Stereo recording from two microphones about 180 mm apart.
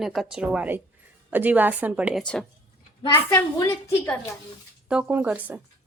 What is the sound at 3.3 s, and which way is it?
Speech, 15° left (ahead or behind).